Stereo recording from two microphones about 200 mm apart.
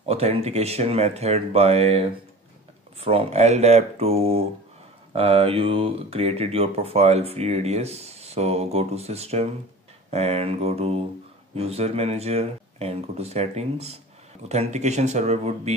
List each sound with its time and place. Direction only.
0.1 s speech: 30° right (ahead or behind)